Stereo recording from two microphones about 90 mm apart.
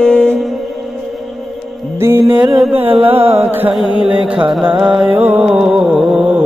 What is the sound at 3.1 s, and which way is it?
Music, 90° right.